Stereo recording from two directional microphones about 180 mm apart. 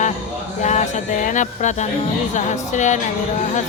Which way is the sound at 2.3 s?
40° left (ahead or behind).